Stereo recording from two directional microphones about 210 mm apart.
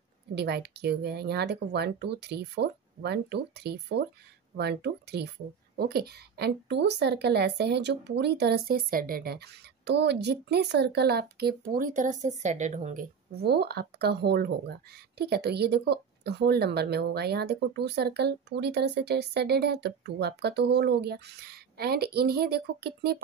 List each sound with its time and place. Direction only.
0.3 s speech: 50° right (ahead or behind); by 13.0 s 35° right (ahead or behind)
13.4 s speech: 50° right (ahead or behind)